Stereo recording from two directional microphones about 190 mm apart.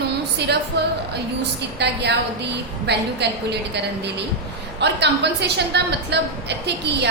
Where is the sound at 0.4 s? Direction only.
60° right (ahead or behind).